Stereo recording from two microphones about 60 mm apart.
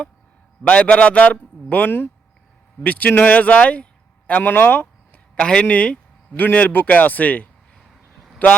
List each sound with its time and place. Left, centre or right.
0.6 s speech: centre
5.4 s speech: centre